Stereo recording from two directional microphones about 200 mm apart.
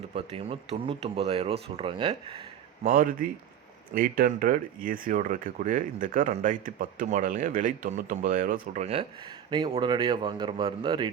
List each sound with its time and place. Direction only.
0.1 s speech: 30° right (ahead or behind)
2.8 s speech: 45° right (ahead or behind); by 11.1 s 25° right (ahead or behind)